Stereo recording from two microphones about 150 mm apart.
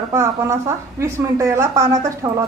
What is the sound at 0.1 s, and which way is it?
A woman's voice, 20° right (ahead or behind).